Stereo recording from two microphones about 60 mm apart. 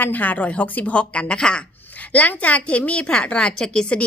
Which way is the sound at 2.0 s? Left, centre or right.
Left.